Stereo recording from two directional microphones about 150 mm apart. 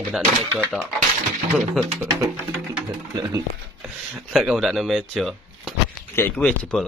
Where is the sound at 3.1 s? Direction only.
25° right (ahead or behind).